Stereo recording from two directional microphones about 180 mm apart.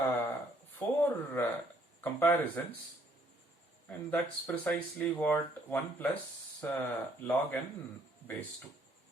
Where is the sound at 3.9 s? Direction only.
10° left (ahead or behind).